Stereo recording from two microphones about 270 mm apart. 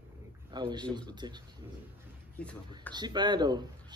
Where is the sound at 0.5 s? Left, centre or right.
Centre.